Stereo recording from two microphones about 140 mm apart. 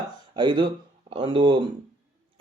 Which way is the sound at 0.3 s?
35° right (ahead or behind).